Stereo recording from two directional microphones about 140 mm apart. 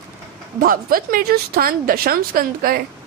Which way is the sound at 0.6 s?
90° right.